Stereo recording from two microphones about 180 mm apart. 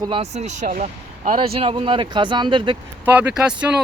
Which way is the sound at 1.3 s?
35° right (ahead or behind).